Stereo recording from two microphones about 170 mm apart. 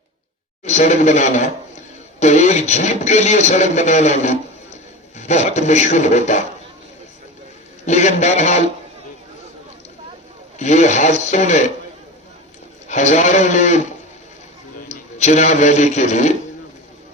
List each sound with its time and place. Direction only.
0.6 s speech: 45° left (ahead or behind)
7.9 s speech: 45° left (ahead or behind)
10.6 s speech: 45° left (ahead or behind)
12.9 s speech: 45° left (ahead or behind)
14.8 s a man's voice: 45° left (ahead or behind)